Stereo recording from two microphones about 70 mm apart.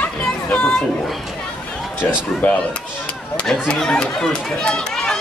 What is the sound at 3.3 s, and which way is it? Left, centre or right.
Speech, centre.